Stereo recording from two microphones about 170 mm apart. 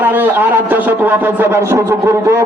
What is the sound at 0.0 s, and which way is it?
A man's voice, 10° right (ahead or behind).